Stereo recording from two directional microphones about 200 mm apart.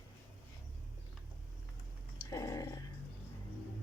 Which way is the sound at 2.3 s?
15° left (ahead or behind).